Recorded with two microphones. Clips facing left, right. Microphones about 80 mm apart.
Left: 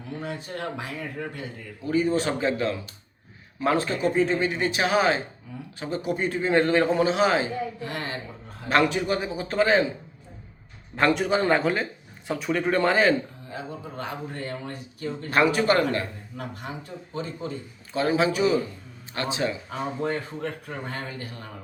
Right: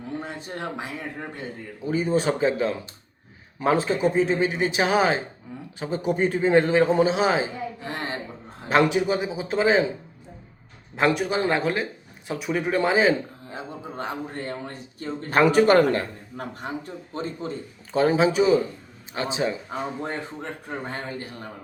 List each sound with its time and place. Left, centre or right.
0.2 s a man's voice: right
11.2 s a man's voice: centre
13.5 s a man's voice: right
17.9 s a man's voice: right